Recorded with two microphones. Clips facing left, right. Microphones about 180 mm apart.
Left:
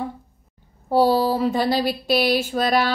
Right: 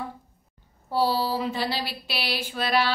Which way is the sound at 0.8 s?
50° left (ahead or behind).